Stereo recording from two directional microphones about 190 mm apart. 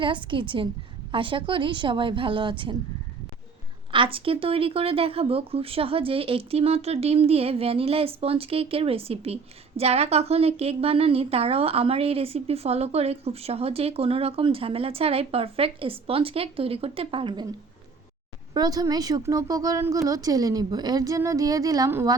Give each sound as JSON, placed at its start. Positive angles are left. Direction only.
{"t": 0.0, "sound": "a woman's voice", "side_deg": -25}
{"t": 3.9, "sound": "speech", "side_deg": -25}
{"t": 18.5, "sound": "a woman's voice", "side_deg": -20}